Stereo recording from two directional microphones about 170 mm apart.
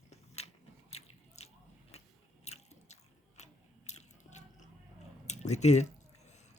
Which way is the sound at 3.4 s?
40° left (ahead or behind).